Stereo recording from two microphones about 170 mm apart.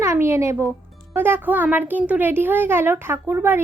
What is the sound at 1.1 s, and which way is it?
A child's voice, 10° right (ahead or behind).